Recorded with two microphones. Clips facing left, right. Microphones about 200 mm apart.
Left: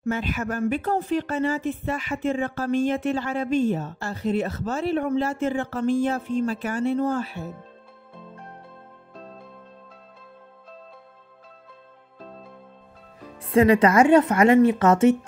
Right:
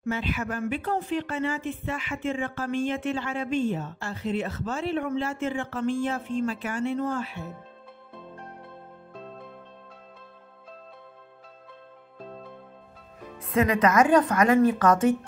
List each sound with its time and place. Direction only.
0.0 s speech: 45° left (ahead or behind)
13.4 s speech: 30° left (ahead or behind)